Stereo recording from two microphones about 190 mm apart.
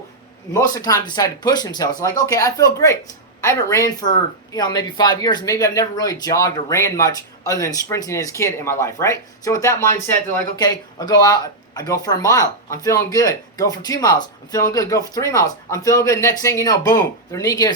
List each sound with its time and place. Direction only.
0.5 s speech: 20° left (ahead or behind)